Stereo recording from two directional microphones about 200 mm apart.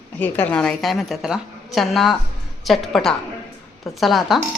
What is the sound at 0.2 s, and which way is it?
A woman's voice, 10° left (ahead or behind).